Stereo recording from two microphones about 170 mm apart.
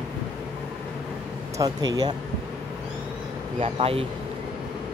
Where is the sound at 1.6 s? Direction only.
25° right (ahead or behind).